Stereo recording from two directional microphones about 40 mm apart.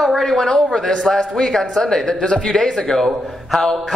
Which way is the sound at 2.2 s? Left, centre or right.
Left.